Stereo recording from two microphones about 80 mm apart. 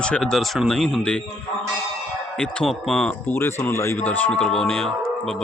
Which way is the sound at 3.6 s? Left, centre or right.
Left.